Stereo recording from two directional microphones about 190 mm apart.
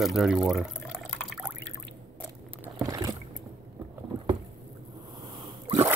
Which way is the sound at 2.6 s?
20° right (ahead or behind).